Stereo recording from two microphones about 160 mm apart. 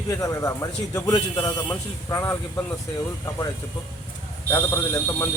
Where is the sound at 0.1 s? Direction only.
20° left (ahead or behind).